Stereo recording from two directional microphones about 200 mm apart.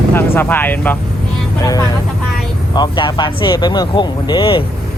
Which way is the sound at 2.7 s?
20° left (ahead or behind).